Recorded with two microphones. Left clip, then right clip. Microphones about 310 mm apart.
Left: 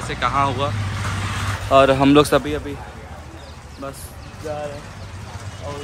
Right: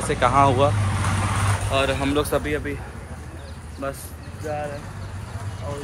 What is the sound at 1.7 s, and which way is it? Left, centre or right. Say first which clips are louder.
Speech: left 11 dB; left.